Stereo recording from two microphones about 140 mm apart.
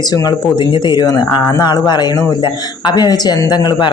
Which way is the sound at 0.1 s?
30° left (ahead or behind).